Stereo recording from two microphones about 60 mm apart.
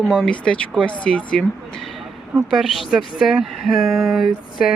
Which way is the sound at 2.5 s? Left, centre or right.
Centre.